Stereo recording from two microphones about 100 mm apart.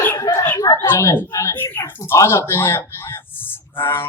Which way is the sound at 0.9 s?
25° left (ahead or behind).